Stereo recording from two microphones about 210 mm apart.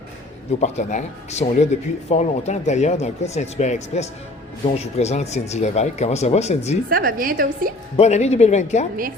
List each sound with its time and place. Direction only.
0.6 s speech: 35° left (ahead or behind)
6.9 s a woman's voice: 45° right (ahead or behind)
7.9 s speech: 30° left (ahead or behind)